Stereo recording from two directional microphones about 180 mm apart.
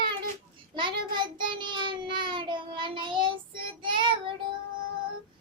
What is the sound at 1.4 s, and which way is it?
Child singing, 25° right (ahead or behind).